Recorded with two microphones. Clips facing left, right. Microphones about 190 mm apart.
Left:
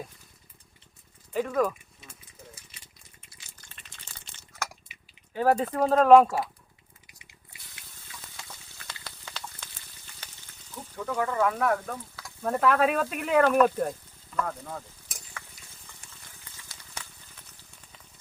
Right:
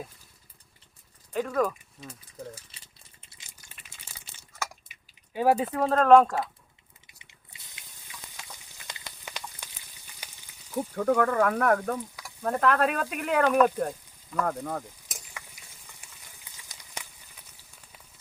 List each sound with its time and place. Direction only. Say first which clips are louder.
1.3 s speech: left 1 dB; centre (ahead or behind)
3.3 s a sound: right 1 dB; 15° right (ahead or behind)
4.9 s drip: left 3 dB; 45° right (ahead or behind)
5.3 s speech: even; 10° right (ahead or behind); by 6.5 s 5° left (ahead or behind)
7.1 s a sound: left 1 dB; 25° right (ahead or behind)
10.8 s speech: right 7 dB; 55° right (ahead or behind)
12.4 s speech: left 1 dB; 5° left (ahead or behind)
14.4 s speech: right 5 dB; 50° right (ahead or behind)
15.2 s stir: left 2 dB; 10° right (ahead or behind)
15.9 s a sound: left 1 dB; 10° right (ahead or behind)